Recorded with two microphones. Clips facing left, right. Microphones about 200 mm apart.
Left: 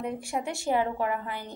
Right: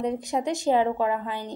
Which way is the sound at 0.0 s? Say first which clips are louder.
Right 5 dB; 20° right (ahead or behind).